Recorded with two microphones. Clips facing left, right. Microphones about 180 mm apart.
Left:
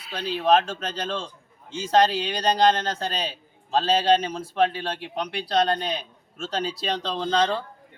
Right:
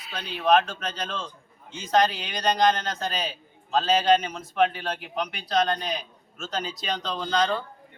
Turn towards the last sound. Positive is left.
turn(degrees=30)  # may be behind; listen again after turning